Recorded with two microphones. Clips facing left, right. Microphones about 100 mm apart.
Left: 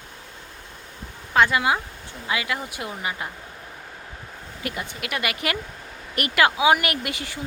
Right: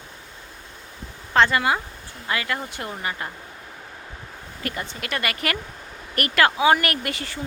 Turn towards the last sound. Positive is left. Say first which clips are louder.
# right 1 dB
turn(degrees=15)  # may be behind; listen again after turning